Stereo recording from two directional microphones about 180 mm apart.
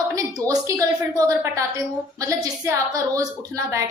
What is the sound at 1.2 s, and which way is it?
A woman's voice, 15° right (ahead or behind).